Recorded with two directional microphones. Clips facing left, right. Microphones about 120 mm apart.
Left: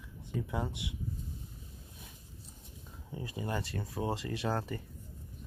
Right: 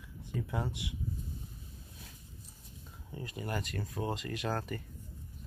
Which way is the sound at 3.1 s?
20° left (ahead or behind).